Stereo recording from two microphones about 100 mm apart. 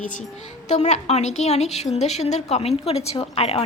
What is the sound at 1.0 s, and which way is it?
Speech, 90° left.